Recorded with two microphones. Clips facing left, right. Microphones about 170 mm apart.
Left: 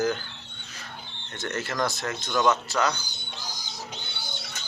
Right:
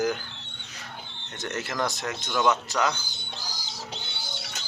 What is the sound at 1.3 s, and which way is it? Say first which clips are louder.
Speech: left 1 dB; 20° right (ahead or behind).